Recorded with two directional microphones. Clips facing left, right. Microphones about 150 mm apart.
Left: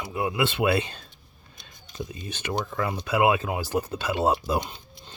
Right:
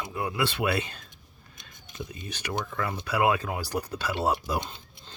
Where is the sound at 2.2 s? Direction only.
25° left (ahead or behind).